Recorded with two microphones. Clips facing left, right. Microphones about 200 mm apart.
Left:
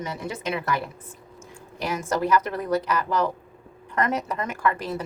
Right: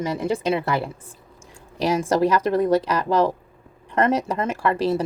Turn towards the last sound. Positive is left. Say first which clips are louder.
# right 5 dB
turn(degrees=-30)  # may be behind; listen again after turning